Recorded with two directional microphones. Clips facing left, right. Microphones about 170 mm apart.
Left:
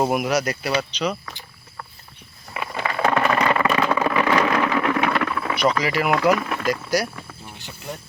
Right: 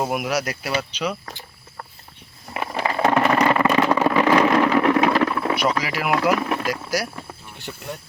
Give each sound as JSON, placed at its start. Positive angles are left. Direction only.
{"t": 0.0, "sound": "speech", "side_deg": 0}
{"t": 2.6, "sound": "a sound", "side_deg": -25}
{"t": 3.7, "sound": "vehicle", "side_deg": -15}
{"t": 5.8, "sound": "speech", "side_deg": -5}